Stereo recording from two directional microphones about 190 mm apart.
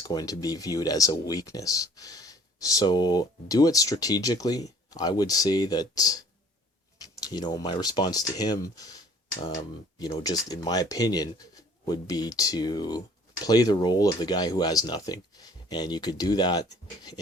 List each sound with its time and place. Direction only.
0.0 s speech: 20° left (ahead or behind)